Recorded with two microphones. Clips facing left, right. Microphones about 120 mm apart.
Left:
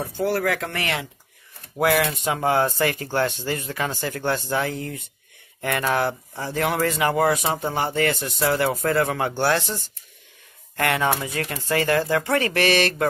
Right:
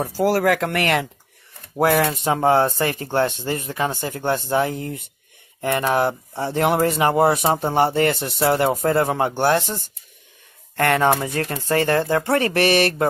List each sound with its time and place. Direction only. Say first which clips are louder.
0.2 s speech: right 5 dB; 40° right (ahead or behind)
1.8 s speech: right 3 dB; 35° right (ahead or behind)
9.6 s speech: right 3 dB; 40° right (ahead or behind)